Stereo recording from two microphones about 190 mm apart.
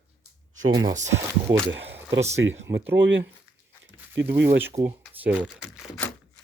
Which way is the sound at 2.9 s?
80° right.